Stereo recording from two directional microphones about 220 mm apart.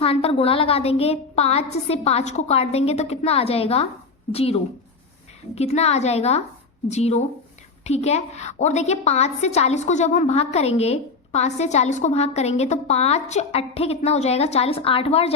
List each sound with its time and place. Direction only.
0.0 s a woman's voice: 25° left (ahead or behind)